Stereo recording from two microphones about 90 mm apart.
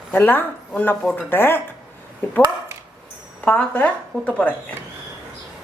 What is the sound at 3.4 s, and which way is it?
Speech, 20° left (ahead or behind).